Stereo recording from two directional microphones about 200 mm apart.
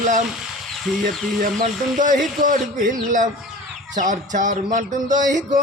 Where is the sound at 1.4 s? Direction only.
45° right (ahead or behind).